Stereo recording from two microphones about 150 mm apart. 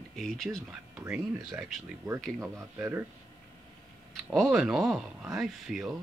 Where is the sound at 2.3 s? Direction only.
15° right (ahead or behind).